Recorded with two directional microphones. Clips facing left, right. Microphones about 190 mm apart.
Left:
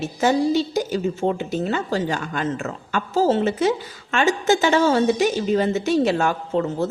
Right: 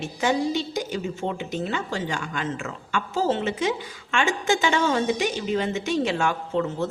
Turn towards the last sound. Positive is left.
turn(degrees=40)  # may be behind; listen again after turning